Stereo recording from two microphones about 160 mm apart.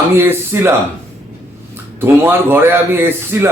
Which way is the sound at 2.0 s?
15° right (ahead or behind).